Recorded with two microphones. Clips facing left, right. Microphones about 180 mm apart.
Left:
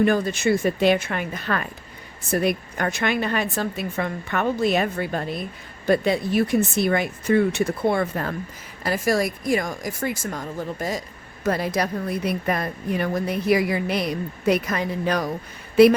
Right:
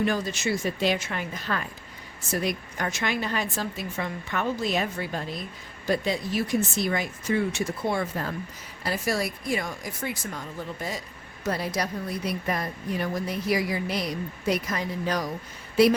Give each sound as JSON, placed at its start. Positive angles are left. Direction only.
{"t": 0.0, "sound": "a woman's voice", "side_deg": 55}
{"t": 8.8, "sound": "a woman's voice", "side_deg": 45}